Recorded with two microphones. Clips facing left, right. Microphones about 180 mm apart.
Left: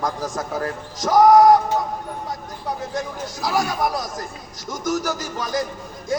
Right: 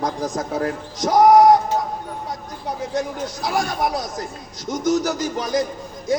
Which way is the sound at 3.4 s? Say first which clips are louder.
Left 1 dB; 25° right (ahead or behind).